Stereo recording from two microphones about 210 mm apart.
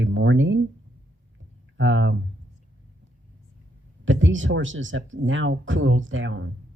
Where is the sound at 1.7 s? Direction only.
65° right (ahead or behind).